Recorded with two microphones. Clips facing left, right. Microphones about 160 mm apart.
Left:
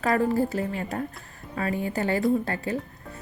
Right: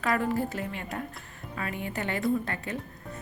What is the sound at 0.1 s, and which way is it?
A woman's voice, 35° left (ahead or behind).